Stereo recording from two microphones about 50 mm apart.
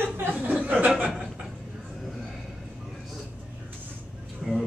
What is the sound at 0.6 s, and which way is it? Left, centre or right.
Chuckle, right.